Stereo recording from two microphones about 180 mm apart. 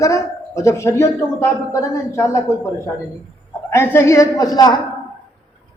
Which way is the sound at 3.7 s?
15° left (ahead or behind).